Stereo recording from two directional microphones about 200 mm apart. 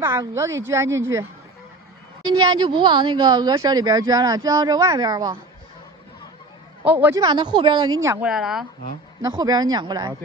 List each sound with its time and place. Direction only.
0.0 s a woman's voice: 10° right (ahead or behind)
2.2 s speech: 20° right (ahead or behind)
7.0 s a woman's voice: 15° right (ahead or behind)
8.3 s a woman's voice: centre (ahead or behind)
9.2 s speech: 20° right (ahead or behind)